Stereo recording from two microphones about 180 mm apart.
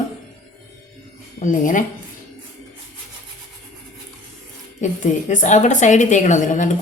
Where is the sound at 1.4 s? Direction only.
45° left (ahead or behind).